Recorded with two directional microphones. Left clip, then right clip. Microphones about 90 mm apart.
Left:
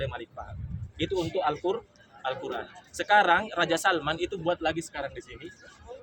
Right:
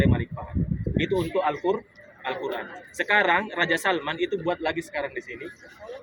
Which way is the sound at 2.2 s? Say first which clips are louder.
Right 3 dB; 40° left (ahead or behind).